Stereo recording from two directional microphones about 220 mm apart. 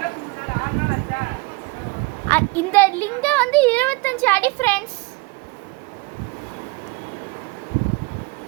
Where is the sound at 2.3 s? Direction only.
10° left (ahead or behind).